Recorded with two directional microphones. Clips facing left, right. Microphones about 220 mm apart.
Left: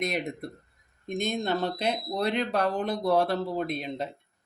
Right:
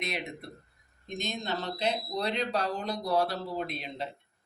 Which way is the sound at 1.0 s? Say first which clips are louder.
Left 7 dB; 50° left (ahead or behind).